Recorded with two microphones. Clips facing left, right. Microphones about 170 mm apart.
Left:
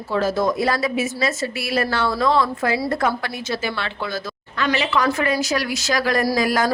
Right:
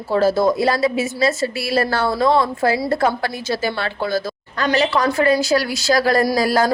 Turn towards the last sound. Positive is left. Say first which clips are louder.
# right 2 dB
turn(degrees=-30)  # may be behind; listen again after turning